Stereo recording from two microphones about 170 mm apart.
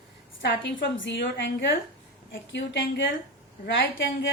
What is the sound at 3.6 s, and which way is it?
Speech, 70° left (ahead or behind).